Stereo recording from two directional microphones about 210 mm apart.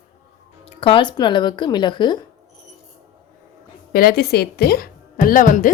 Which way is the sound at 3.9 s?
45° left (ahead or behind).